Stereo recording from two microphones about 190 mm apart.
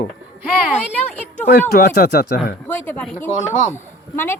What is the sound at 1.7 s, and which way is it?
Speech, 55° left (ahead or behind).